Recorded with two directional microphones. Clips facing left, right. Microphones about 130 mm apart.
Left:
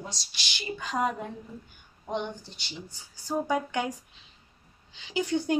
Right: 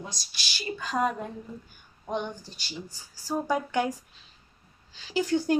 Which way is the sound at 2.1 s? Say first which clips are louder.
Right 1 dB; 20° left (ahead or behind).